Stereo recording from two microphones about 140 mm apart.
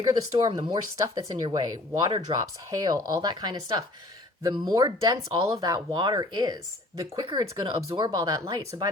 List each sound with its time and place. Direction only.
0.0 s speech: 25° right (ahead or behind)